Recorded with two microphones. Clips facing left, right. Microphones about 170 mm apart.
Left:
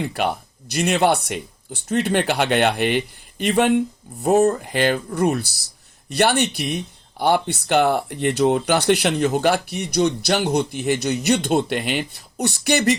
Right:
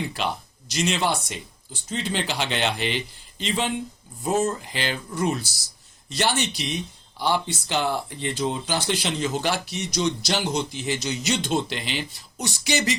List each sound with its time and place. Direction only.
0.0 s speech: 55° left (ahead or behind)